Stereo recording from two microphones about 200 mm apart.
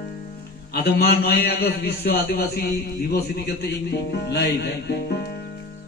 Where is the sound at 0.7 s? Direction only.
50° left (ahead or behind).